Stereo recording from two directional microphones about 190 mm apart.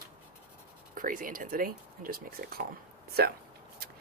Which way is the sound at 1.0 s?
45° right (ahead or behind).